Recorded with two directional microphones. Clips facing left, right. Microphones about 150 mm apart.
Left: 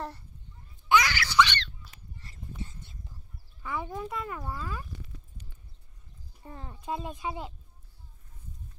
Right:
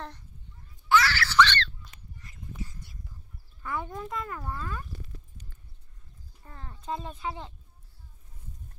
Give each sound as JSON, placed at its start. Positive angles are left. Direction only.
{"t": 0.8, "sound": "baby laughter", "side_deg": 15}
{"t": 2.1, "sound": "a sound", "side_deg": 30}
{"t": 3.6, "sound": "speech", "side_deg": 5}
{"t": 6.4, "sound": "speech", "side_deg": 20}